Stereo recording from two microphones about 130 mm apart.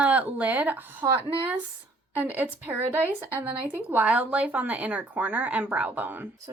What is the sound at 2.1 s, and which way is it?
A woman's voice, 15° right (ahead or behind).